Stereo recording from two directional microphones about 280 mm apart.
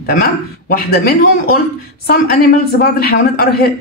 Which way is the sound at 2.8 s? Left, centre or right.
Left.